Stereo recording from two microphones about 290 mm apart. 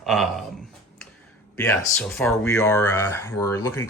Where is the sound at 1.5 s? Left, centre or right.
Centre.